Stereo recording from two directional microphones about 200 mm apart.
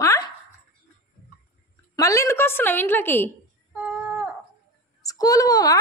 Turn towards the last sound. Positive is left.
turn(degrees=20)  # may be behind; listen again after turning